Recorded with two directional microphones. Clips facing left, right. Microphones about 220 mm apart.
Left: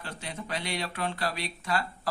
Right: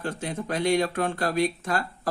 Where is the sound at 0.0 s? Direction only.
50° right (ahead or behind).